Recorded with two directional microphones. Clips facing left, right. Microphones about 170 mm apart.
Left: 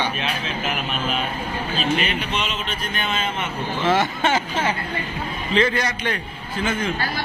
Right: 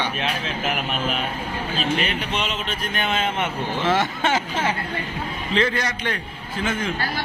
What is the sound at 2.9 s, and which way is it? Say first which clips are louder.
Speech: right 3 dB; 65° right (ahead or behind).